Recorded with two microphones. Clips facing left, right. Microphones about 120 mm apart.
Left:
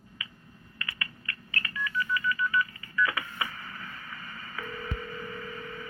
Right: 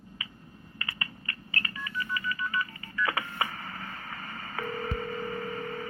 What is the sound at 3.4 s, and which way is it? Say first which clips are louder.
Telephone: right 2 dB; 50° right (ahead or behind).